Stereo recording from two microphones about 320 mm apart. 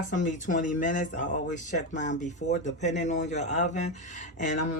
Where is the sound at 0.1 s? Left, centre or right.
Left.